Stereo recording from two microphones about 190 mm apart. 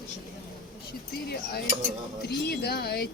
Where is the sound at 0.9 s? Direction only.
55° left (ahead or behind).